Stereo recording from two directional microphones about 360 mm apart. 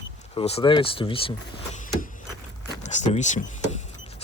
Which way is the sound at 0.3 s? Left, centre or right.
Centre.